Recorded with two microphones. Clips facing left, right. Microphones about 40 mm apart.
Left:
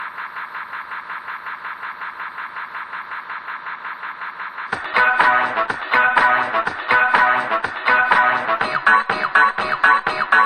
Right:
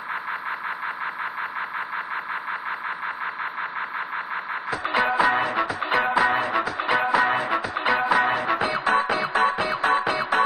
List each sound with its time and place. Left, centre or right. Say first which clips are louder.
4.9 s music: left 6 dB; left